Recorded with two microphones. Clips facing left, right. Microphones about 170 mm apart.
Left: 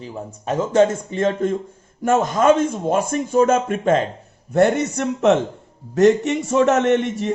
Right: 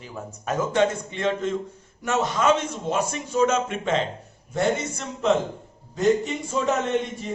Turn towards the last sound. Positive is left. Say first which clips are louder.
# left 8 dB
turn(degrees=75)  # may be behind; listen again after turning